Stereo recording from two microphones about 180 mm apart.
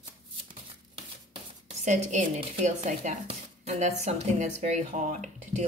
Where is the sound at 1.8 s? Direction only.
40° right (ahead or behind).